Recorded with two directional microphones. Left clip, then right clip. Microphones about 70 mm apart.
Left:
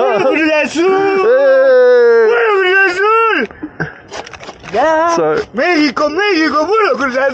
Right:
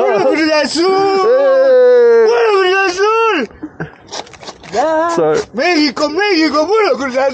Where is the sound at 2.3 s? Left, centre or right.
Right.